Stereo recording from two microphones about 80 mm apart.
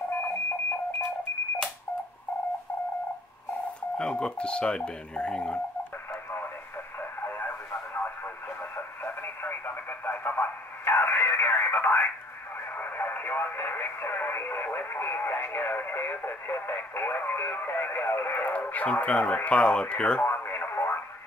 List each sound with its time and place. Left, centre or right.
0.1 s alarm clock: left
4.0 s speech: centre
7.0 s radio: left
18.5 s speech: centre
20.2 s radio: left